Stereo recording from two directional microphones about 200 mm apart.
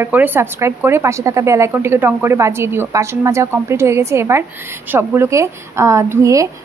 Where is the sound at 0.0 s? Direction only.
10° right (ahead or behind).